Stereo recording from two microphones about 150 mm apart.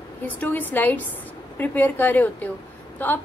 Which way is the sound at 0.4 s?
10° left (ahead or behind).